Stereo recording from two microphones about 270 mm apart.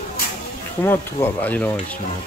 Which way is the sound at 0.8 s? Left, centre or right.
Centre.